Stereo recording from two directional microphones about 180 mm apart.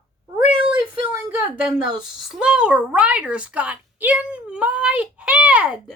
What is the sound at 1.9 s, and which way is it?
Speech, 5° right (ahead or behind).